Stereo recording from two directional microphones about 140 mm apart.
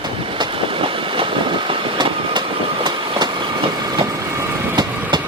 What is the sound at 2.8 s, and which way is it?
Train, 35° right (ahead or behind).